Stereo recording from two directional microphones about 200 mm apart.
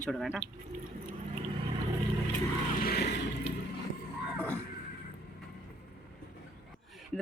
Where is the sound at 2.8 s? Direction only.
50° left (ahead or behind).